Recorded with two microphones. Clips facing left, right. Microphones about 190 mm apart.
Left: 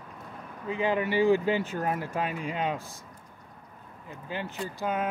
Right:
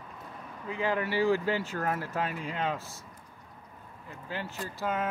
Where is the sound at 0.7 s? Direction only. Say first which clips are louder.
Left 3 dB; 20° left (ahead or behind).